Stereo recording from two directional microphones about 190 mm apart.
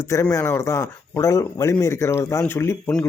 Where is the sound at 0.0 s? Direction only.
15° left (ahead or behind).